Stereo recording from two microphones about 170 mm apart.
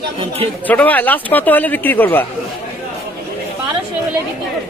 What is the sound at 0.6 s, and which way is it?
Speech, 10° left (ahead or behind).